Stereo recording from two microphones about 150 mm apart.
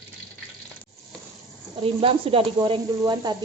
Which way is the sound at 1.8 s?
35° right (ahead or behind).